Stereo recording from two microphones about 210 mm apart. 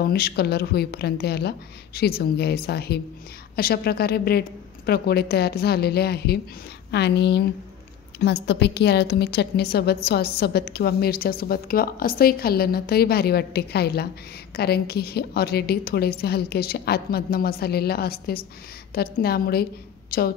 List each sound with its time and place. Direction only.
0.0 s a woman's voice: 50° left (ahead or behind)